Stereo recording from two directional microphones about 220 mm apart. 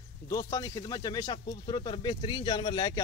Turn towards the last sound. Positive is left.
turn(degrees=20)  # may be behind; listen again after turning